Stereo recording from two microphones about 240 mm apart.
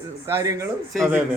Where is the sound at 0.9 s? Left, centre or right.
Centre.